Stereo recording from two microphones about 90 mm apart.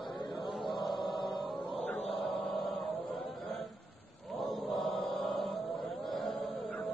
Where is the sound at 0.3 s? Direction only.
Centre (ahead or behind).